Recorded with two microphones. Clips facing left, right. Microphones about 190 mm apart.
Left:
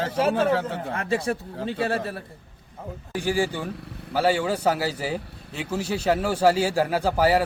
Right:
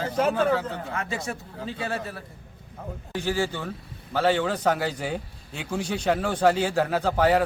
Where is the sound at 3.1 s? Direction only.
15° left (ahead or behind).